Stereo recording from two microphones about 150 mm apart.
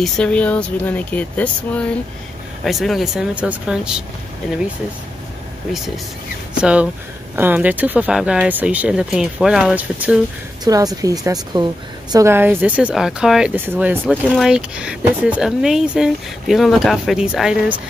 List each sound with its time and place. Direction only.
0.0 s speech: 5° left (ahead or behind)
6.5 s speech: 5° right (ahead or behind)
10.6 s speech: 25° right (ahead or behind); by 17.7 s 5° right (ahead or behind)